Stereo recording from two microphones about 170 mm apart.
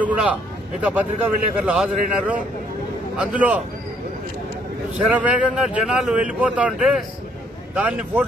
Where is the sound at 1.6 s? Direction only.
5° right (ahead or behind).